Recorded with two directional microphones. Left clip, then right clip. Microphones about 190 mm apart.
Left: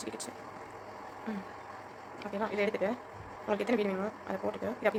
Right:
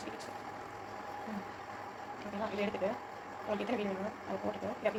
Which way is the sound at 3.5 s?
45° left (ahead or behind).